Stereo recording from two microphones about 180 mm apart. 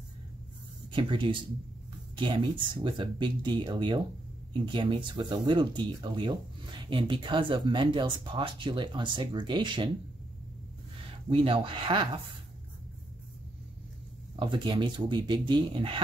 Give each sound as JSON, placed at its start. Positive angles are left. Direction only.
{"t": 0.9, "sound": "speech", "side_deg": -25}
{"t": 11.2, "sound": "speech", "side_deg": -30}
{"t": 14.4, "sound": "speech", "side_deg": -30}